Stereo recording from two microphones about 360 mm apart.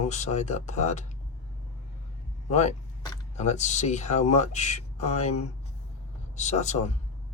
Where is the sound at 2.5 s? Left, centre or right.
Centre.